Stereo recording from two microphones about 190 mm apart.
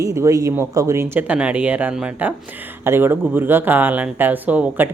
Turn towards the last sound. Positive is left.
turn(degrees=-10)  # may be behind; listen again after turning